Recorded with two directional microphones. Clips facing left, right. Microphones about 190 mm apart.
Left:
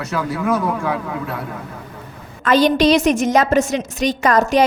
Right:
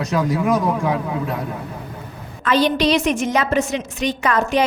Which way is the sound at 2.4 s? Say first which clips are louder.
Left 3 dB; 45° left (ahead or behind).